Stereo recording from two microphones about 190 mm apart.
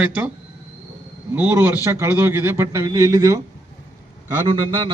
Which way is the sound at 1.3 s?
10° right (ahead or behind).